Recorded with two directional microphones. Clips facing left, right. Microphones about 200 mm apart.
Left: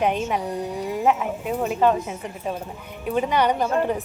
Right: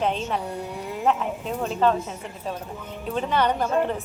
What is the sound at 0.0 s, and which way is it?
Speech, 15° left (ahead or behind).